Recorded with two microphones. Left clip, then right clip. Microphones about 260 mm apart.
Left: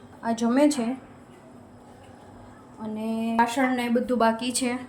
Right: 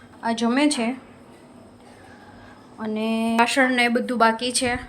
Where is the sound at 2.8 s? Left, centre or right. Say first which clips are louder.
Right 6 dB; right.